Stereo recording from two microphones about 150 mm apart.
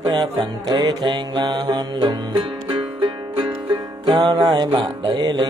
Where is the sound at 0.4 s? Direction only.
30° right (ahead or behind).